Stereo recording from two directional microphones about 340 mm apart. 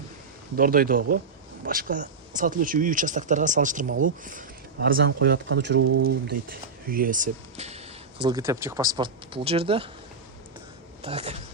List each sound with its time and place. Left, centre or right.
0.5 s speech: right
5.8 s speech: right
6.2 s speech: right
11.0 s speech: centre